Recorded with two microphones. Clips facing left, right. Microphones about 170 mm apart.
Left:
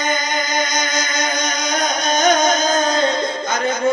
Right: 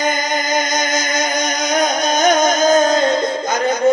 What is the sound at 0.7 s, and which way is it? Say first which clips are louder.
Music: right 3 dB; 40° right (ahead or behind).